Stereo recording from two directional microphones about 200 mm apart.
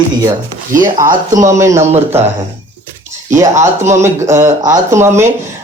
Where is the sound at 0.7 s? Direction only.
15° right (ahead or behind).